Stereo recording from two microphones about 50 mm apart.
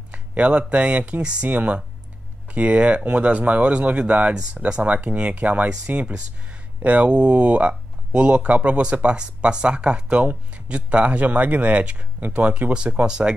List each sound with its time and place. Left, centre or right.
0.1 s speech: right